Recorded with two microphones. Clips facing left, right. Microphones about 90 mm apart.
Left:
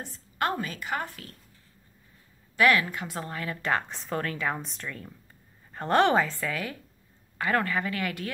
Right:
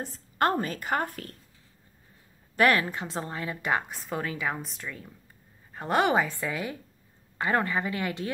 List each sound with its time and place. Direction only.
0.0 s a woman's voice: 40° right (ahead or behind)
2.5 s a woman's voice: 35° right (ahead or behind)